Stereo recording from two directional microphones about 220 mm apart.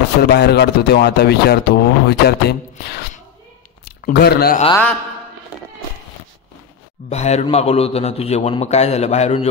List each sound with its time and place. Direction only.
0.2 s speech: 45° left (ahead or behind)
7.1 s a man's voice: 30° left (ahead or behind)